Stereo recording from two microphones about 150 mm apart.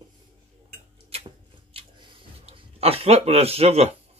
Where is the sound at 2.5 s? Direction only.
40° right (ahead or behind).